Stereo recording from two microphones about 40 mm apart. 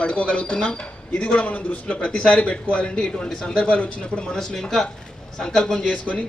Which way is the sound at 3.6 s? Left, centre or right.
Left.